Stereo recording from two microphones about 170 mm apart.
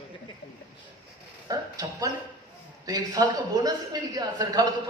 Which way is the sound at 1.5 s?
20° right (ahead or behind).